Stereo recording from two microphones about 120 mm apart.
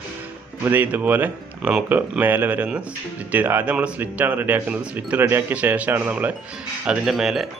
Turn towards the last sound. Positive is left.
turn(degrees=-5)  # may be behind; listen again after turning